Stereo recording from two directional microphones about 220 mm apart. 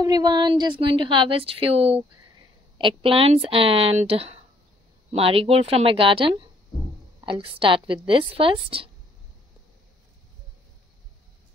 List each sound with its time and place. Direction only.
0.0 s a woman's voice: 20° right (ahead or behind)